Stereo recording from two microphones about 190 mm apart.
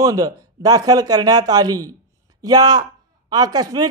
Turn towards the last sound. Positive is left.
turn(degrees=-20)  # may be behind; listen again after turning